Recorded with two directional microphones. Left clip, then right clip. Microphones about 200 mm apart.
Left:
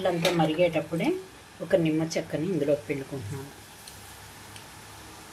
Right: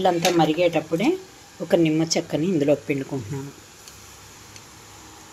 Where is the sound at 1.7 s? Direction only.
45° right (ahead or behind).